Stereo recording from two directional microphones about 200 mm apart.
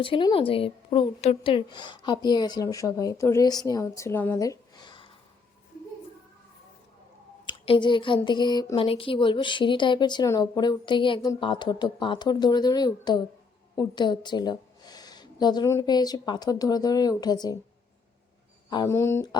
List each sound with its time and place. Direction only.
0.0 s speech: 25° left (ahead or behind)
7.4 s a woman's voice: 25° left (ahead or behind)
18.7 s speech: 15° left (ahead or behind)